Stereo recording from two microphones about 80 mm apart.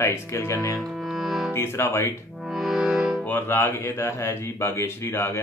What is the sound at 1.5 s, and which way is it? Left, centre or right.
Speech, left.